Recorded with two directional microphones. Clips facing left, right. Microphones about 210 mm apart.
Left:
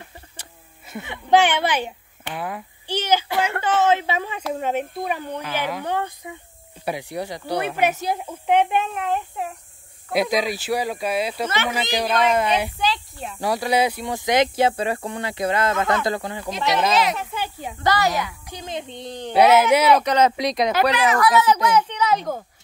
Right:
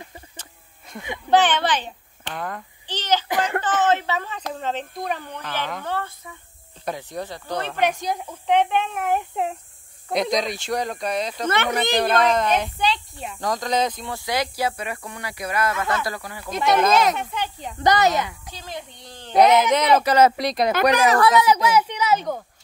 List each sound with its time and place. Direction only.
0.4 s a sound: 5° left (ahead or behind)
1.3 s a child's voice: 10° left (ahead or behind)
8.9 s a child's voice: 10° right (ahead or behind)
9.3 s a woman's voice: 20° right (ahead or behind)
10.1 s speech: 5° left (ahead or behind)
11.4 s speech: 55° right (ahead or behind)
11.7 s speech: 5° left (ahead or behind); by 16.5 s 25° left (ahead or behind)
17.2 s speech: 5° left (ahead or behind)
17.8 s a woman's voice: 20° right (ahead or behind)
18.5 s speech: 20° left (ahead or behind)
19.3 s speech: 5° left (ahead or behind)
20.0 s speech: 5° right (ahead or behind)
20.9 s speech: 40° right (ahead or behind)
21.4 s a child's voice: 10° right (ahead or behind)